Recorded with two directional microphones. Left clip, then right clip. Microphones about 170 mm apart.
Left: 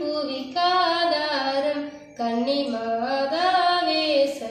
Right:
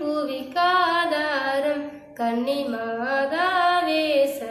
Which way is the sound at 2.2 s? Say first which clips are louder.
Even; 5° right (ahead or behind).